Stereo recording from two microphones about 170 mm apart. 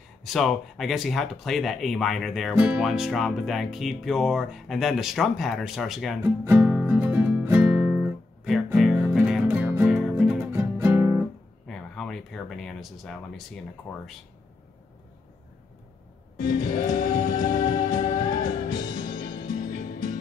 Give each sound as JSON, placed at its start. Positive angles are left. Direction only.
{"t": 0.2, "sound": "speech", "side_deg": 0}
{"t": 6.2, "sound": "music", "side_deg": -10}
{"t": 10.5, "sound": "music", "side_deg": -15}
{"t": 11.6, "sound": "a sound", "side_deg": 0}
{"t": 13.9, "sound": "speech", "side_deg": 10}
{"t": 16.7, "sound": "music", "side_deg": 25}